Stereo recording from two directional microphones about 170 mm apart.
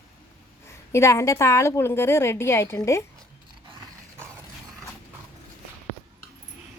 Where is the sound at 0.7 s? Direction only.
15° left (ahead or behind).